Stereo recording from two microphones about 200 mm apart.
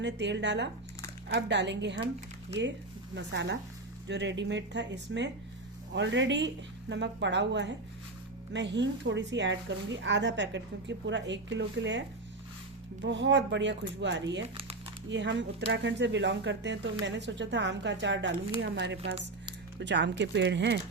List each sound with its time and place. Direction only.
0.0 s speech: 60° right (ahead or behind)